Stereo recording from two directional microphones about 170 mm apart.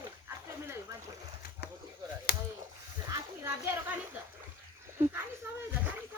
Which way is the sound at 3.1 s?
15° right (ahead or behind).